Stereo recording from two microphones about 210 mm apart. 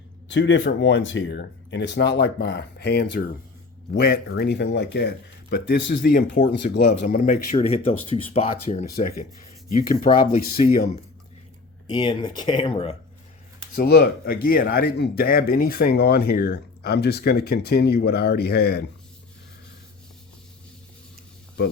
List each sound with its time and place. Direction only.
0.3 s speech: 60° left (ahead or behind)
7.3 s speech: 30° left (ahead or behind)
9.9 s speech: 45° left (ahead or behind)
11.9 s speech: 20° left (ahead or behind)
13.7 s speech: 50° left (ahead or behind)